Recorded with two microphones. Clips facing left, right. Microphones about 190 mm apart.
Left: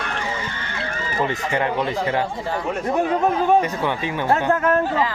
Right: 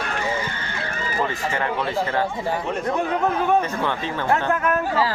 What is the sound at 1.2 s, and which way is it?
Speech, 20° left (ahead or behind).